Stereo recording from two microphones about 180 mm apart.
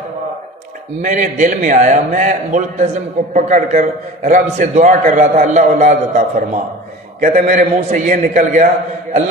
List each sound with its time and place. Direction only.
1.0 s a man's voice: 45° right (ahead or behind)